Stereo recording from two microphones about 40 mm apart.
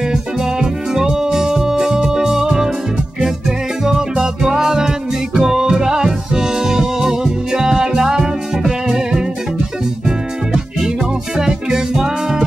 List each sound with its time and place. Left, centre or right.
0.1 s music: centre